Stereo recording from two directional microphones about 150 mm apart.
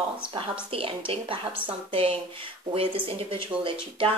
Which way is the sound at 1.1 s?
35° right (ahead or behind).